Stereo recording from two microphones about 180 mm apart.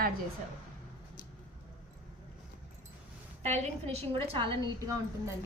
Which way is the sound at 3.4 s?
40° right (ahead or behind).